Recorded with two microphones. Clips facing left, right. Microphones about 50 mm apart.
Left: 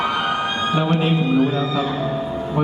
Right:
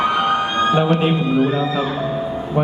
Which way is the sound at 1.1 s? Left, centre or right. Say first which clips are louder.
Right 1 dB; centre.